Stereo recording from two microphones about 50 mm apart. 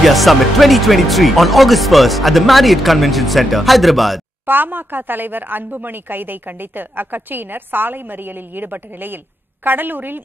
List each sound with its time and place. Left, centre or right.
0.0 s speech: centre
4.5 s a woman's voice: right